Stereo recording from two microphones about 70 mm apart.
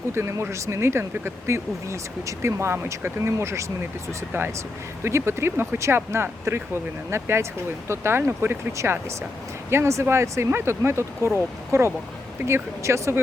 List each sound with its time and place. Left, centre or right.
0.1 s speech: right
4.3 s speech: right